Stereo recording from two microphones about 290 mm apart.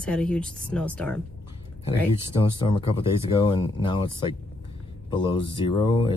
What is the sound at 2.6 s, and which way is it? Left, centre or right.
Speech, centre.